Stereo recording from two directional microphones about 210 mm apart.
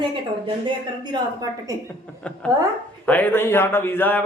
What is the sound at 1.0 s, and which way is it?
Speech, 20° right (ahead or behind).